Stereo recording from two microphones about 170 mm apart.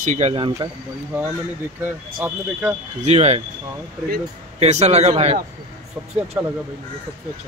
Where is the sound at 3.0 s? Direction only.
40° right (ahead or behind).